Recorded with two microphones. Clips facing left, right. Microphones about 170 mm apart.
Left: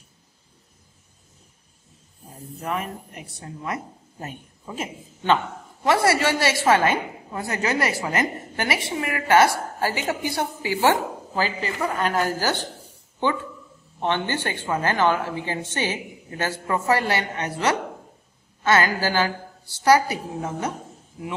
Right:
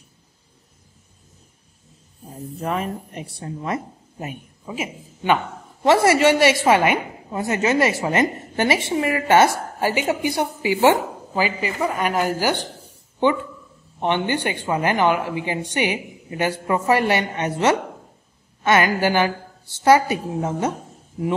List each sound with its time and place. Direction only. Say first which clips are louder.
2.6 s a woman's voice: right 4 dB; 25° right (ahead or behind)
4.2 s a man's voice: right 4 dB; 10° right (ahead or behind)
5.9 s a woman's voice: right 5 dB; 25° right (ahead or behind)
13.9 s a woman's voice: right 3 dB; 15° right (ahead or behind)